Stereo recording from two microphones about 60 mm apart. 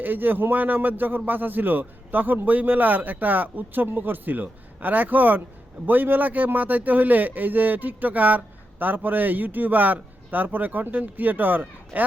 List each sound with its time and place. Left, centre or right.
0.0 s a man's voice: right